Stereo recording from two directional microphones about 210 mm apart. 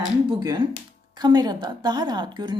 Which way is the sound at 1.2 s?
20° right (ahead or behind).